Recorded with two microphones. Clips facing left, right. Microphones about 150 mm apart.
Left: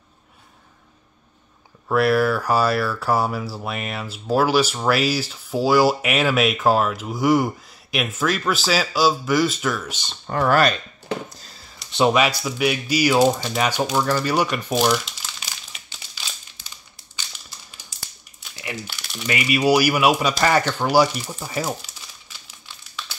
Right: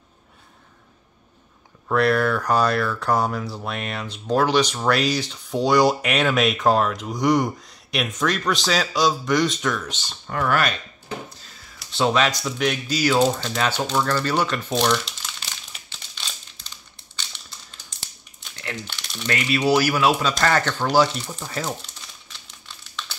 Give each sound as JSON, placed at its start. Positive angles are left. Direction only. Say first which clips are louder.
{"t": 1.9, "sound": "speech", "louder": "left 1 dB", "side_deg": 5}
{"t": 10.0, "sound": "speech", "louder": "left 4 dB", "side_deg": 35}
{"t": 11.2, "sound": "a sound", "louder": "left 1 dB", "side_deg": 40}
{"t": 11.9, "sound": "speech", "louder": "left 2 dB", "side_deg": 15}
{"t": 17.2, "sound": "crumpling", "louder": "even", "side_deg": 5}
{"t": 18.4, "sound": "speech", "louder": "left 1 dB", "side_deg": 5}